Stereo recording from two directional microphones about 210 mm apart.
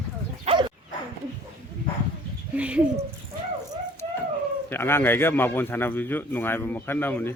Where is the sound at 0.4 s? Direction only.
25° right (ahead or behind).